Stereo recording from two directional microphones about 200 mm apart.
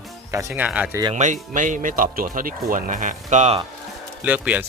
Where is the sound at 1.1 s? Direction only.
35° right (ahead or behind).